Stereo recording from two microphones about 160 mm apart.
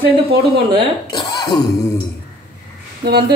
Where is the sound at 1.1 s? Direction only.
25° left (ahead or behind).